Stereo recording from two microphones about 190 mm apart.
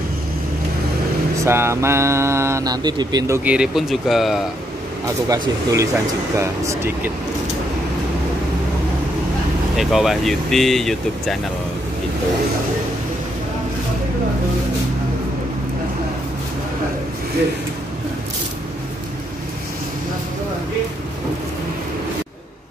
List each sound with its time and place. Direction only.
1.4 s mantra: 15° right (ahead or behind)
3.4 s speech: 5° right (ahead or behind)
5.0 s mantra: 15° right (ahead or behind)
9.8 s speech: centre (ahead or behind)